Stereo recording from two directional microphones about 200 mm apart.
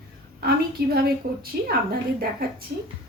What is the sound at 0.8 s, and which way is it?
Speech, 50° right (ahead or behind).